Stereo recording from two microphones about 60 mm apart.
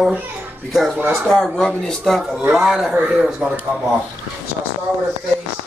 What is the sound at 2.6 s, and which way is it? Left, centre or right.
Speech, centre.